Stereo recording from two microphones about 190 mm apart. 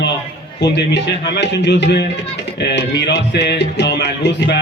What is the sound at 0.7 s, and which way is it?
Speech, 65° left (ahead or behind).